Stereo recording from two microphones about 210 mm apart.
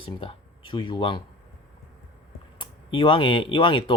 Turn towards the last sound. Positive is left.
turn(degrees=25)  # may be behind; listen again after turning